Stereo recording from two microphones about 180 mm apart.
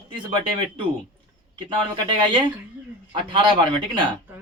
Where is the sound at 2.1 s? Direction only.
25° right (ahead or behind).